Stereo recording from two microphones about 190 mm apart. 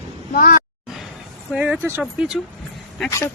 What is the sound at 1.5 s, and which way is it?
Speech, 5° right (ahead or behind).